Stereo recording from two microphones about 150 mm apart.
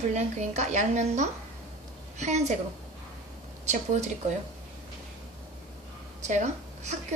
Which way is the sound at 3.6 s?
50° right (ahead or behind).